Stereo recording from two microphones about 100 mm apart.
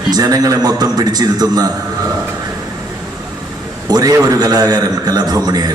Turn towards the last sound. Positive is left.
turn(degrees=-40)  # may be behind; listen again after turning